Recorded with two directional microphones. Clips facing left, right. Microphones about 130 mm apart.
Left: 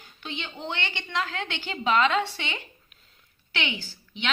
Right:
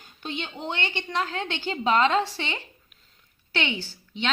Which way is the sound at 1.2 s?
25° right (ahead or behind).